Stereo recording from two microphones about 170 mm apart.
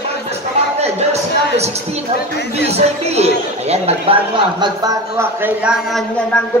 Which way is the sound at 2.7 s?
40° right (ahead or behind).